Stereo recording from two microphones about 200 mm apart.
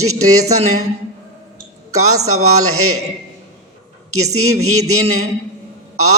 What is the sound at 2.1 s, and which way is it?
Speech, 90° right.